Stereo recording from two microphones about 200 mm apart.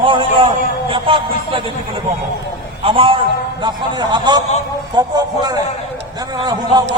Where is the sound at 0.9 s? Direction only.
25° right (ahead or behind).